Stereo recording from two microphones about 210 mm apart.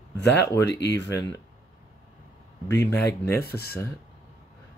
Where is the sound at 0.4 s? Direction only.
55° left (ahead or behind).